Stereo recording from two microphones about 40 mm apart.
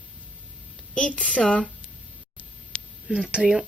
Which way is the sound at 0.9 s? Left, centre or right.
Left.